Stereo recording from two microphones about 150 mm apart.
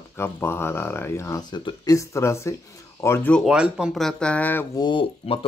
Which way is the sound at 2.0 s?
20° left (ahead or behind).